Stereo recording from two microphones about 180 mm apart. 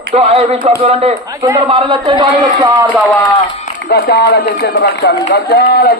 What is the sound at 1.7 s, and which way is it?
Speech, 30° right (ahead or behind).